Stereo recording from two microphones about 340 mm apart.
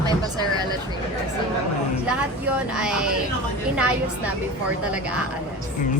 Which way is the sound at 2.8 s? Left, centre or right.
Centre.